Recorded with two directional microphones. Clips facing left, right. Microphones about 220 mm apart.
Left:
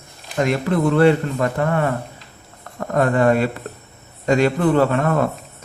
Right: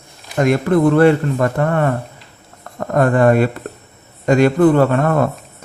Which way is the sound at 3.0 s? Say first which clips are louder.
Right 3 dB; 50° right (ahead or behind).